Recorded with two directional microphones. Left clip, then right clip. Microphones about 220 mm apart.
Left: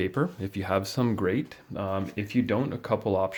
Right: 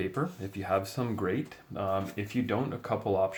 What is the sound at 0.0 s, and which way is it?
Speech, 40° left (ahead or behind).